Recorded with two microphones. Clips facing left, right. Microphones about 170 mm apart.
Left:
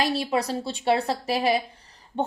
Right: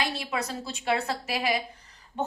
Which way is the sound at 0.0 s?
35° left (ahead or behind).